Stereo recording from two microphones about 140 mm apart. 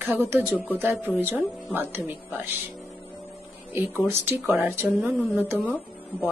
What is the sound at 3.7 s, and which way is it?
Speech, 15° right (ahead or behind).